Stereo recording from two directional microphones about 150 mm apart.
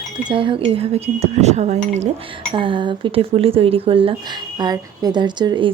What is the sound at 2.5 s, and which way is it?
Speech, 35° right (ahead or behind).